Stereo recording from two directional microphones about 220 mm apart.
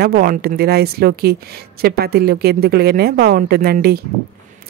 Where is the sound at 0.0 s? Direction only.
45° right (ahead or behind).